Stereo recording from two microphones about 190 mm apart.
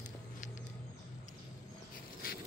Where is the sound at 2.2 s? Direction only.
50° left (ahead or behind).